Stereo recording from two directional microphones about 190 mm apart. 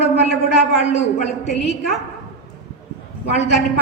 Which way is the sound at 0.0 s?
35° left (ahead or behind).